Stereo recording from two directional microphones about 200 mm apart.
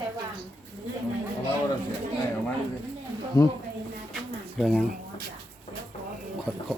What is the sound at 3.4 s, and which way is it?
Speech, 15° left (ahead or behind).